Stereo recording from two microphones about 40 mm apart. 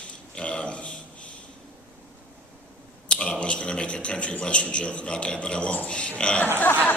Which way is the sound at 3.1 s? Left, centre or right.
Left.